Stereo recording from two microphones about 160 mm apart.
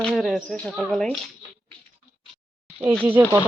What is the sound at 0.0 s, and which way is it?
A woman's voice, centre (ahead or behind).